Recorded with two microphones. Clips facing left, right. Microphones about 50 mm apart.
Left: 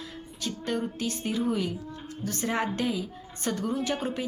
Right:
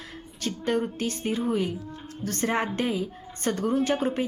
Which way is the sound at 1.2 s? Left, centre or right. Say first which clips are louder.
Right 2 dB; right.